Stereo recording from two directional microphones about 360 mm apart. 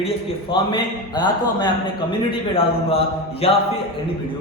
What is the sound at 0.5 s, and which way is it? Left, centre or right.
A man's voice, centre.